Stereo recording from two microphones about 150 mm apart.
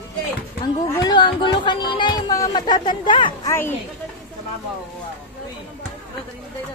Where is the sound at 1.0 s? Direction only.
30° left (ahead or behind).